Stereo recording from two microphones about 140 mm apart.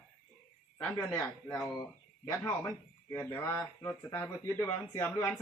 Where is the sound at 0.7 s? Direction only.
20° left (ahead or behind).